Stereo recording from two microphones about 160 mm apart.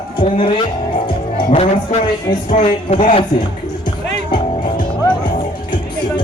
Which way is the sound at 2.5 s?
45° left (ahead or behind).